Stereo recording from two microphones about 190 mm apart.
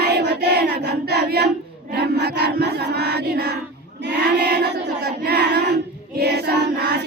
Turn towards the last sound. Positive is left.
turn(degrees=-65)  # may be behind; listen again after turning